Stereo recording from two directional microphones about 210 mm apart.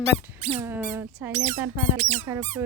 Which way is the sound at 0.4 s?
30° right (ahead or behind).